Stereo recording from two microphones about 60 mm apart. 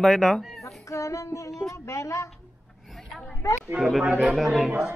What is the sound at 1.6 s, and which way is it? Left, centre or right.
Speech, left.